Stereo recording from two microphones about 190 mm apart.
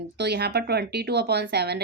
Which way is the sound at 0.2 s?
60° right (ahead or behind).